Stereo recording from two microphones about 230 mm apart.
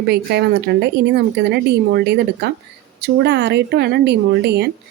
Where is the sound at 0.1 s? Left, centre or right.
Right.